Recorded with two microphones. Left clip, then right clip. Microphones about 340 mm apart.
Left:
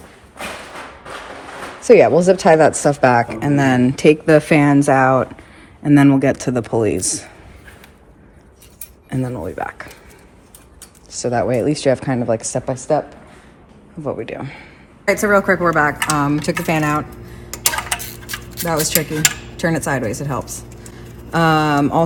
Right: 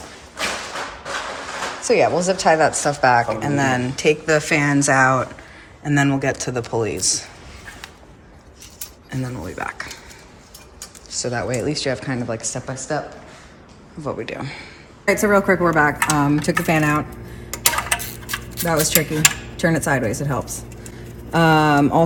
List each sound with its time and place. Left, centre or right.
1.8 s speech: left; by 5.3 s centre
5.8 s speech: centre
9.0 s speech: centre
11.1 s speech: centre
14.0 s a woman's voice: centre